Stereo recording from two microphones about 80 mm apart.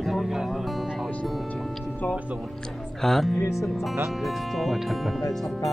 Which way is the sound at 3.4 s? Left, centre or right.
Left.